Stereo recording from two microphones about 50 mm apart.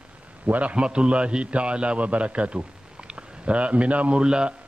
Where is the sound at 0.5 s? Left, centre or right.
Right.